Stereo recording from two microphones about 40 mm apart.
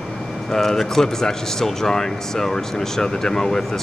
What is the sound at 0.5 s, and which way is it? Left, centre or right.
Speech, centre.